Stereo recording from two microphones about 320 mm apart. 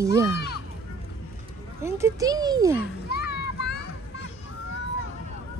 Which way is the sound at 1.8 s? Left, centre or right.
Centre.